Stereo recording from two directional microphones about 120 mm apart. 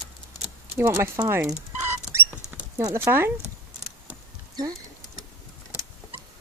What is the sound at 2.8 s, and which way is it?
Speech, 25° right (ahead or behind).